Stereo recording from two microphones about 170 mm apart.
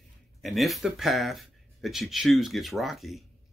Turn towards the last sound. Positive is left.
turn(degrees=0)  # may be behind; listen again after turning